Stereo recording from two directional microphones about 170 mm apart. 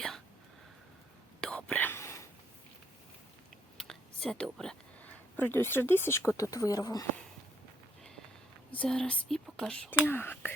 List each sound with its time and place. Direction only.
1.4 s whispering: 5° left (ahead or behind)
3.8 s a sound: 5° left (ahead or behind)
5.4 s speech: 15° left (ahead or behind)
8.7 s speech: 5° left (ahead or behind)